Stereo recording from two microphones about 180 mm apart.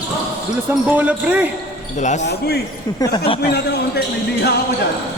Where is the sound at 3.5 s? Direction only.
65° left (ahead or behind).